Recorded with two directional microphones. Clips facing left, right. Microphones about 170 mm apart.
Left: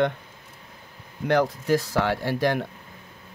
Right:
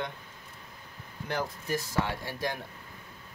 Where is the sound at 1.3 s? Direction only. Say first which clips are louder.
Left 11 dB; 80° left.